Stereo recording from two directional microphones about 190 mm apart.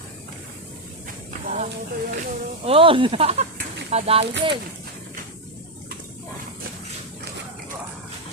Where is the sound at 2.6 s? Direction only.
30° right (ahead or behind).